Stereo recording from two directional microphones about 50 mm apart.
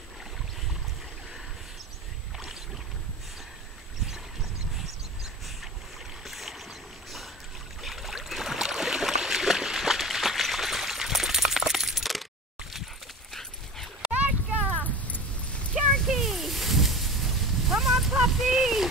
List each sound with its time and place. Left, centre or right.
6.2 s boat: centre
12.7 s dog: centre
14.8 s keys jangling: left
15.7 s a sound: centre